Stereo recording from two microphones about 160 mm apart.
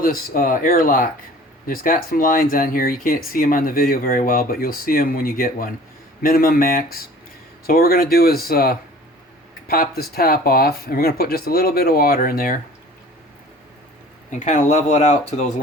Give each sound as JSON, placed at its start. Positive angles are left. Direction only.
{"t": 0.0, "sound": "speech", "side_deg": 60}
{"t": 14.3, "sound": "speech", "side_deg": 50}